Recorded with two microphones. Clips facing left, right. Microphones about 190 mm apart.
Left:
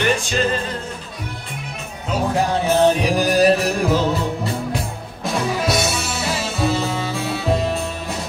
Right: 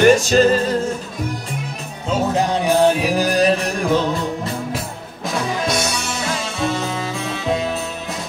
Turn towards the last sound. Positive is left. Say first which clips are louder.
# left 1 dB
turn(degrees=5)  # may be behind; listen again after turning